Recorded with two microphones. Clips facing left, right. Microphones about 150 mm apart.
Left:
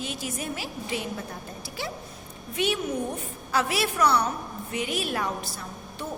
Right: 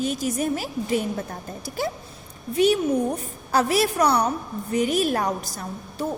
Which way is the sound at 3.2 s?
40° right (ahead or behind).